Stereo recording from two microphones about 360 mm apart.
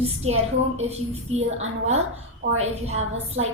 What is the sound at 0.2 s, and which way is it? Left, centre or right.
A woman's voice, centre.